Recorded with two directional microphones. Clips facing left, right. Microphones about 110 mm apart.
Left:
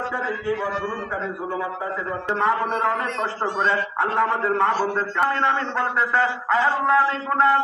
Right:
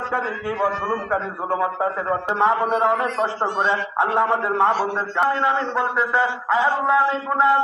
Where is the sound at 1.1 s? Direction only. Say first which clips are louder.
Right 4 dB; 55° right (ahead or behind).